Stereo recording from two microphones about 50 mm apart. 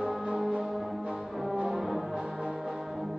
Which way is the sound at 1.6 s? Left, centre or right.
Centre.